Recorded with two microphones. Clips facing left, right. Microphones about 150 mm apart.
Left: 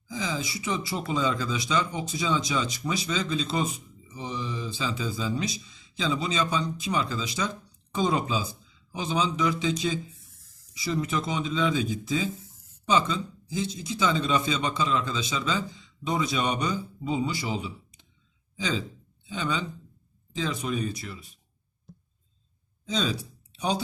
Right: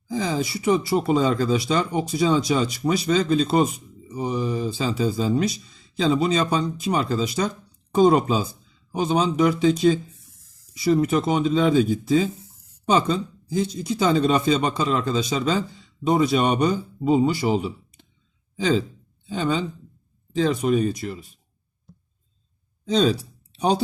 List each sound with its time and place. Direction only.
0.1 s speech: 45° right (ahead or behind)
22.9 s speech: 55° right (ahead or behind)